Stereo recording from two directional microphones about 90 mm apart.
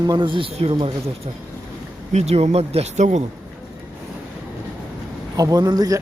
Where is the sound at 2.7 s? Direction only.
90° right.